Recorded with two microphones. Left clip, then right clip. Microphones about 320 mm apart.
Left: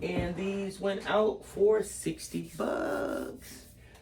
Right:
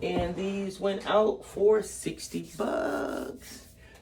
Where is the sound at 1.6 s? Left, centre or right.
Centre.